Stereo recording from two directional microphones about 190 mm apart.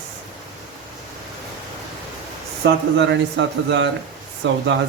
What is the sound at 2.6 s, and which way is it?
Speech, 65° right (ahead or behind).